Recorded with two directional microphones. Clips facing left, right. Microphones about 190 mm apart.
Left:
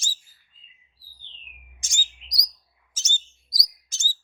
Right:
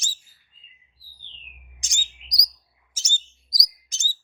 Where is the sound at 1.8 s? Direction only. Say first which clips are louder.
Left 1 dB; 20° right (ahead or behind).